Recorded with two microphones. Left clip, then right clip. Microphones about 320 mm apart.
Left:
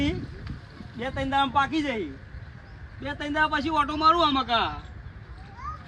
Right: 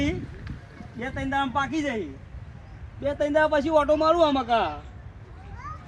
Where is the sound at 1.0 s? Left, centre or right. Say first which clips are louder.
Left 2 dB; left.